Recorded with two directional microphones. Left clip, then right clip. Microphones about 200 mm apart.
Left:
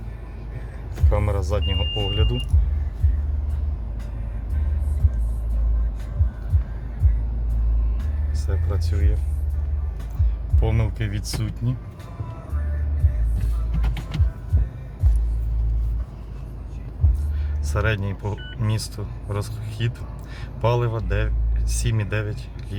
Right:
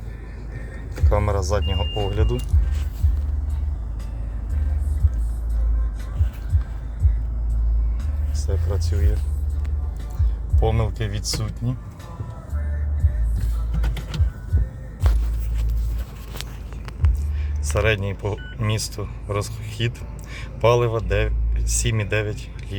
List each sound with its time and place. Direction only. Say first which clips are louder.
1.1 s speech: right 3 dB; centre (ahead or behind)
8.4 s vehicle: right 3 dB; 10° right (ahead or behind)
10.6 s speech: right 4 dB; 5° right (ahead or behind)
17.7 s a man's voice: right 4 dB; 5° right (ahead or behind)